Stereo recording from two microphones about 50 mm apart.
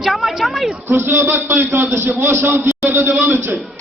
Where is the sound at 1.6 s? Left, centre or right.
Right.